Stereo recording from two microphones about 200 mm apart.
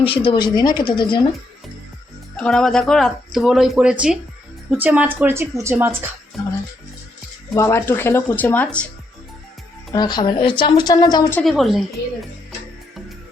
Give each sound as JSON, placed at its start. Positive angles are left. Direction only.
{"t": 0.0, "sound": "speech", "side_deg": 25}
{"t": 2.3, "sound": "a woman's voice", "side_deg": 5}
{"t": 7.5, "sound": "speech", "side_deg": 15}
{"t": 9.9, "sound": "speech", "side_deg": 20}
{"t": 11.4, "sound": "speech", "side_deg": 0}